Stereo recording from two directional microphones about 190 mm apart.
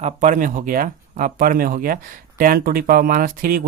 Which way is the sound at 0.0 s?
40° right (ahead or behind).